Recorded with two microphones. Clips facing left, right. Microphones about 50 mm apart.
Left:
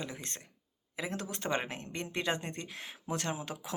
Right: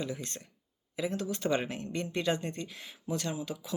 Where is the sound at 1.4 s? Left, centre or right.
Left.